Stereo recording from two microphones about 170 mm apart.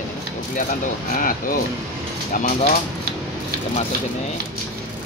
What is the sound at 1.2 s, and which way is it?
Speech, 55° left (ahead or behind).